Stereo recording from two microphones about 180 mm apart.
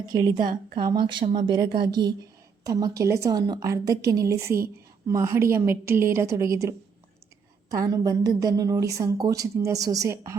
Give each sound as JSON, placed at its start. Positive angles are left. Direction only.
{"t": 0.1, "sound": "a woman's voice", "side_deg": -20}